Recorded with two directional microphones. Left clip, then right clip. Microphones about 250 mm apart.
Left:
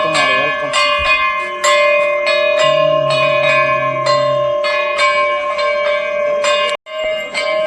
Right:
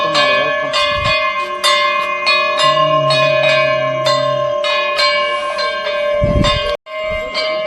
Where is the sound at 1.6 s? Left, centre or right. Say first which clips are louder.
Left 3 dB; right.